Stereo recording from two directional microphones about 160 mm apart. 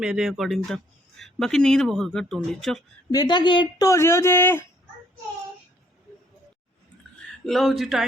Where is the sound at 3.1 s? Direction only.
30° left (ahead or behind).